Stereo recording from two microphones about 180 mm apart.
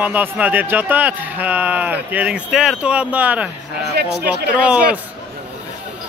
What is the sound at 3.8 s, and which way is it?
Speech, 60° right (ahead or behind).